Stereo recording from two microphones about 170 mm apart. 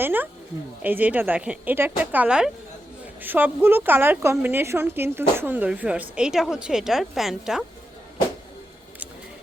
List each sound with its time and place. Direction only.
0.0 s a woman's voice: 10° right (ahead or behind)